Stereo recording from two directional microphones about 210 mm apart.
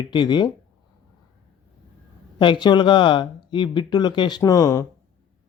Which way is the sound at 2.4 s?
20° left (ahead or behind).